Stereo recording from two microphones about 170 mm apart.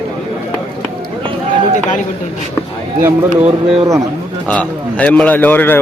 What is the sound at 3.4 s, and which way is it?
Speech, 20° right (ahead or behind).